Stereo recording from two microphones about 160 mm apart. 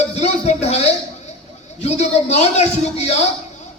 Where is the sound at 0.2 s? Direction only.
45° left (ahead or behind).